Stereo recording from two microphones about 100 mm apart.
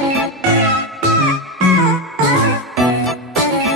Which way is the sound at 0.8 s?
Centre (ahead or behind).